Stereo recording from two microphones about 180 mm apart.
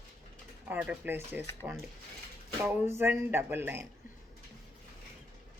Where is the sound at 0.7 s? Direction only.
10° right (ahead or behind).